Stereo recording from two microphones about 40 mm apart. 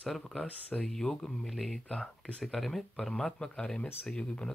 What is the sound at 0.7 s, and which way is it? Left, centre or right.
Speech, centre.